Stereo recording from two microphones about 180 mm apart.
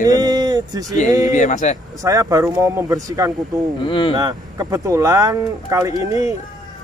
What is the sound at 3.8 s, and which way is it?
Speech, 30° left (ahead or behind).